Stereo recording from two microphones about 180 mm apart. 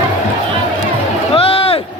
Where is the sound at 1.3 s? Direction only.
30° left (ahead or behind).